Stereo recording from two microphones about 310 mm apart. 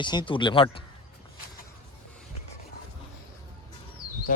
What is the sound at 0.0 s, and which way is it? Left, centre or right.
Speech, centre.